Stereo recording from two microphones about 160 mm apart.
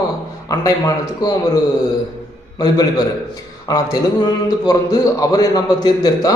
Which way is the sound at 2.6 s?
25° left (ahead or behind).